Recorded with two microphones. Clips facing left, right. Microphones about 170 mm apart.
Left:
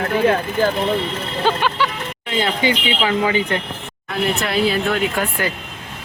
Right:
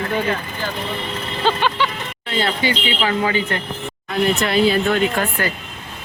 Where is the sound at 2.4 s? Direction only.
15° left (ahead or behind).